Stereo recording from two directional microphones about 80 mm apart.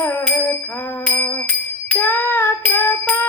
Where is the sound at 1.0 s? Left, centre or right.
Left.